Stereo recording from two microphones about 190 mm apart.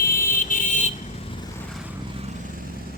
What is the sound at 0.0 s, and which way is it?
Vehicle, 45° left (ahead or behind).